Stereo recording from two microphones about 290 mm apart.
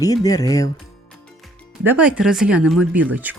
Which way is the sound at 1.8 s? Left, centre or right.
Centre.